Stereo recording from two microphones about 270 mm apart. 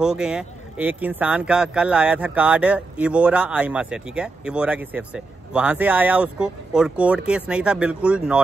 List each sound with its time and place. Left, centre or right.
0.0 s speech: centre